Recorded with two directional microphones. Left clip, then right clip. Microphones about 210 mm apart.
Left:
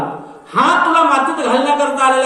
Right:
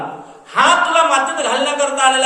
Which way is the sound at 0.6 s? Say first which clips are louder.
Even; 45° right (ahead or behind).